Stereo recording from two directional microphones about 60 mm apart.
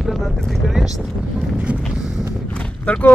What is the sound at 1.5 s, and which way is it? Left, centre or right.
Vehicle, right.